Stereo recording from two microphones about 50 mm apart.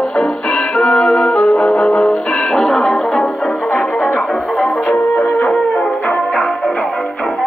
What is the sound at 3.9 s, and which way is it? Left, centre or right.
Music, left.